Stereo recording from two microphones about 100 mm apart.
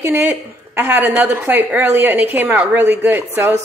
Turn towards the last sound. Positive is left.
turn(degrees=-20)  # may be behind; listen again after turning